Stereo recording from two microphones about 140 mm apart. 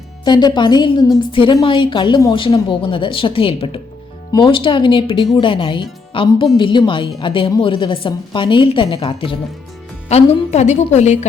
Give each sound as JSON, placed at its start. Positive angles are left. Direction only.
{"t": 0.3, "sound": "a woman's voice", "side_deg": 30}
{"t": 10.1, "sound": "a woman's voice", "side_deg": 50}